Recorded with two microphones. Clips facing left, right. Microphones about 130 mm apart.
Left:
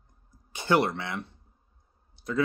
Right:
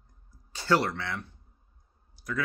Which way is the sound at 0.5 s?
20° left (ahead or behind).